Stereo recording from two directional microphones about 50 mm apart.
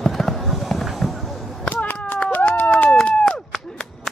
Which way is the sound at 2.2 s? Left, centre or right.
Left.